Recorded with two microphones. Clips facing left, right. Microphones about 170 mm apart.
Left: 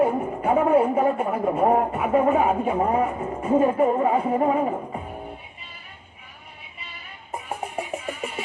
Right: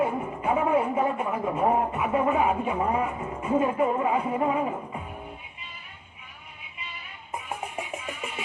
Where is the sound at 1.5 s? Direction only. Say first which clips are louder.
Left 4 dB; 45° left (ahead or behind).